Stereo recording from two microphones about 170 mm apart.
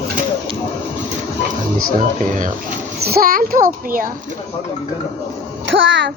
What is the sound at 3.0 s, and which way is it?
Child singing, 60° right (ahead or behind).